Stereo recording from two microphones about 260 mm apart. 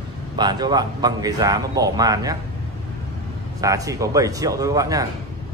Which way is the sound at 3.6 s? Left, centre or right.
Centre.